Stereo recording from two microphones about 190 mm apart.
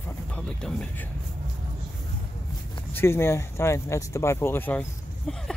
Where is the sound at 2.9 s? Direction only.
15° left (ahead or behind).